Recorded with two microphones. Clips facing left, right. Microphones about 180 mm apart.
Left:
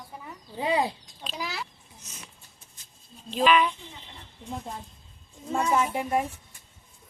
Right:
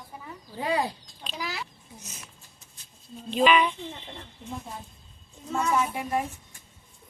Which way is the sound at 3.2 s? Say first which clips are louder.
Right 1 dB; centre (ahead or behind).